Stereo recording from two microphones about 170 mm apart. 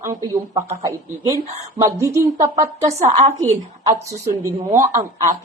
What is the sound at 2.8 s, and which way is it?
Speech, 40° right (ahead or behind).